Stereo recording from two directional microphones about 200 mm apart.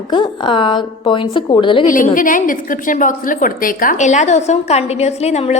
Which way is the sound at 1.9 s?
40° left (ahead or behind).